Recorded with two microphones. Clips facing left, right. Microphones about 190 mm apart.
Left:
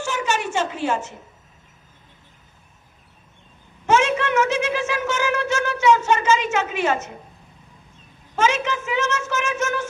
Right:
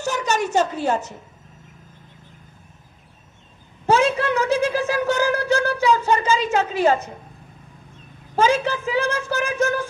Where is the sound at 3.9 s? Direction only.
35° right (ahead or behind).